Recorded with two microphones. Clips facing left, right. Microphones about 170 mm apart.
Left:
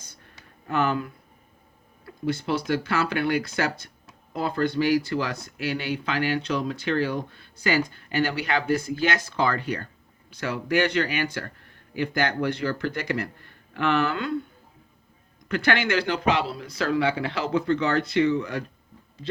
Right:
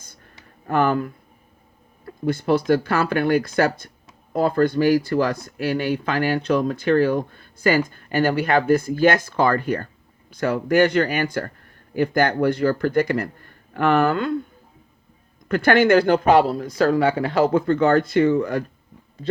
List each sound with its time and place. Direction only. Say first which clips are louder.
0.7 s speech: right 5 dB; 50° right (ahead or behind)
15.4 s speech: right 8 dB; 50° right (ahead or behind)